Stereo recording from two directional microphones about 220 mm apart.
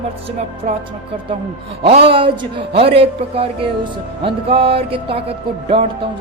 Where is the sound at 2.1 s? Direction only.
25° right (ahead or behind).